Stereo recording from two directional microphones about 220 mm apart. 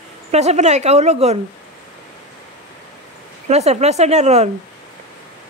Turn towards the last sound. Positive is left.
turn(degrees=-30)  # may be behind; listen again after turning